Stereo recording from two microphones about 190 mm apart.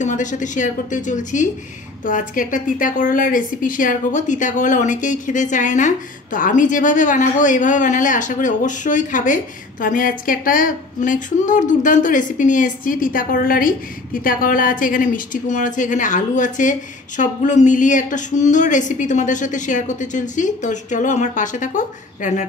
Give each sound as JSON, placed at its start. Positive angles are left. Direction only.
{"t": 0.0, "sound": "a woman's voice", "side_deg": 40}